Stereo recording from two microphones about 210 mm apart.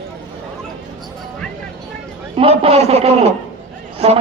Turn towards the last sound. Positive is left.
turn(degrees=-30)  # may be behind; listen again after turning